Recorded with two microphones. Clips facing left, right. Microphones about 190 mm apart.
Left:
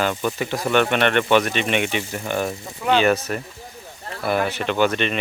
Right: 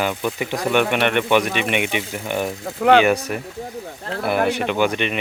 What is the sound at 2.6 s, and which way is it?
Speech, 60° right (ahead or behind).